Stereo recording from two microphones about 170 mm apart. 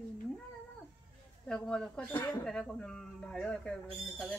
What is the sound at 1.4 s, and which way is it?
Speech, 5° left (ahead or behind).